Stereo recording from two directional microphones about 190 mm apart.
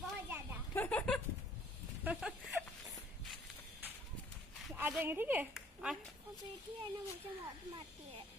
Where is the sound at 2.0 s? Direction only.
5° right (ahead or behind).